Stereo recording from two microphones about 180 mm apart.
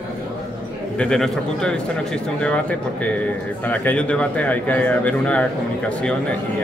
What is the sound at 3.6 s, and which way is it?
A man's voice, 10° left (ahead or behind).